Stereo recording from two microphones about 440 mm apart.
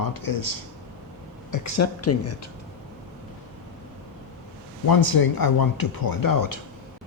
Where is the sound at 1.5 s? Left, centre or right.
Left.